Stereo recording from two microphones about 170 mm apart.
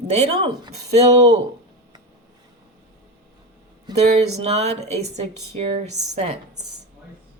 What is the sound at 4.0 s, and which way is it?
Speech, 40° right (ahead or behind).